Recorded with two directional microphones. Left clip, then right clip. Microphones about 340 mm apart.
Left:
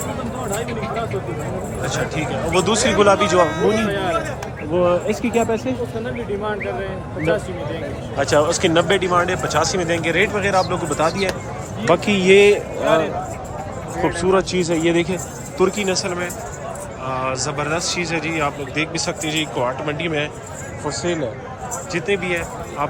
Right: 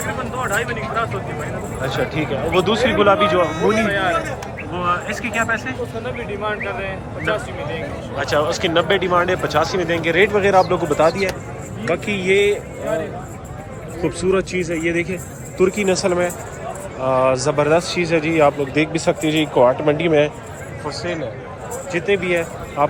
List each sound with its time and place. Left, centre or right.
0.0 s a man's voice: centre
3.4 s a man's voice: centre
8.2 s speech: centre
14.0 s a man's voice: centre
20.8 s a man's voice: centre